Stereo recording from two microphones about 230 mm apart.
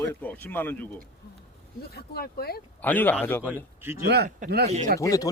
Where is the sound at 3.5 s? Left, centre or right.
Centre.